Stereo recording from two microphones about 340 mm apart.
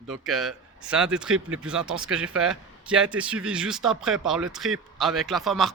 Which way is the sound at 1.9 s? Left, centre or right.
Right.